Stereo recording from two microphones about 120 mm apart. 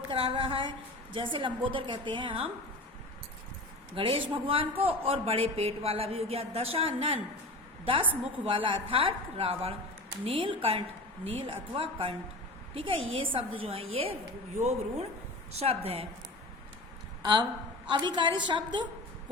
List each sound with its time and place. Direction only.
0.1 s a sound: 50° right (ahead or behind)
3.9 s a man's voice: 45° right (ahead or behind)
8.4 s a man's voice: 45° right (ahead or behind)
14.6 s a woman's voice: 65° right (ahead or behind)
17.8 s a woman's voice: 40° right (ahead or behind)